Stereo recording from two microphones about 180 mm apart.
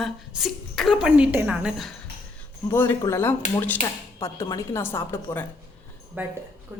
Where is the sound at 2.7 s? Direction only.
15° left (ahead or behind).